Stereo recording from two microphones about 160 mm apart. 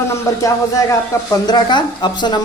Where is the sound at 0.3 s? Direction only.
20° left (ahead or behind).